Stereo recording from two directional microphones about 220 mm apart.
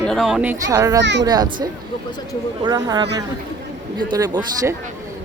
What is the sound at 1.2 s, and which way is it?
Speech, 20° right (ahead or behind).